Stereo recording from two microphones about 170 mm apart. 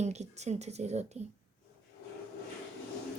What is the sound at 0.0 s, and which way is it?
A woman's voice, 40° right (ahead or behind).